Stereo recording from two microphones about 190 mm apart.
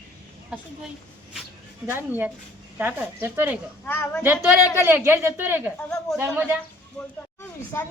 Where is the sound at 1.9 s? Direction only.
10° right (ahead or behind).